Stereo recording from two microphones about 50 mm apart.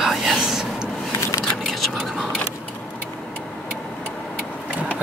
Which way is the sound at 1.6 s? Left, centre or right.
Centre.